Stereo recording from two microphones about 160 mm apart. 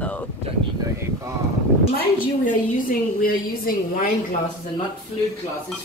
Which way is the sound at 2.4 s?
60° left (ahead or behind).